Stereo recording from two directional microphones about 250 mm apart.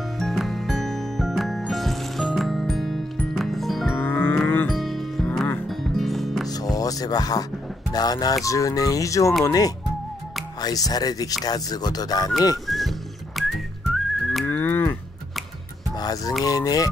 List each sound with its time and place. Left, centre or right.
0.2 s music: centre
6.5 s music: centre
7.9 s speech: centre
12.6 s music: centre
13.4 s whistling: centre
13.9 s livestock: centre
16.0 s a sound: centre
16.4 s speech: centre